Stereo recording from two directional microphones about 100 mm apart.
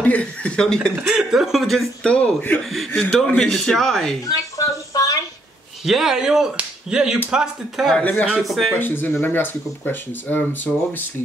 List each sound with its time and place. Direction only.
0.0 s speech: 15° left (ahead or behind)
1.1 s a man's voice: 5° right (ahead or behind)
2.1 s a man's voice: 15° left (ahead or behind)
4.3 s a sound: 35° left (ahead or behind)
5.9 s a man's voice: 5° right (ahead or behind)
8.0 s speech: 15° left (ahead or behind)
8.4 s a man's voice: centre (ahead or behind)
8.7 s speech: 20° left (ahead or behind)